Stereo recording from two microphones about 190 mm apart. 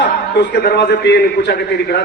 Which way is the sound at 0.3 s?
55° left (ahead or behind).